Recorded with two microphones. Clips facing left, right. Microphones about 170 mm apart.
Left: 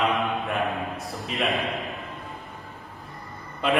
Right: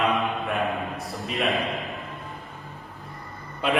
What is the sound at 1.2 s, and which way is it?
Speech, centre (ahead or behind).